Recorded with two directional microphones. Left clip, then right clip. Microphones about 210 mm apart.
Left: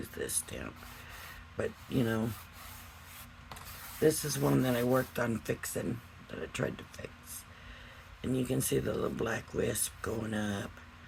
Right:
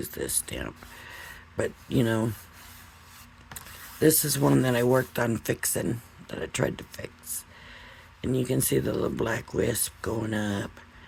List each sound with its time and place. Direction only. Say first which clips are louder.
0.0 s speech: right 6 dB; 45° right (ahead or behind)
4.0 s speech: right 6 dB; 50° right (ahead or behind)
8.2 s speech: right 6 dB; 45° right (ahead or behind)